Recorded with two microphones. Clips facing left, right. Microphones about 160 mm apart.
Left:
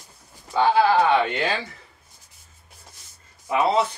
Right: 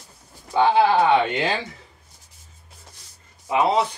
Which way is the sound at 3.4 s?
15° right (ahead or behind).